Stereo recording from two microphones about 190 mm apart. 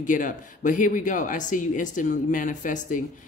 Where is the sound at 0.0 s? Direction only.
45° left (ahead or behind).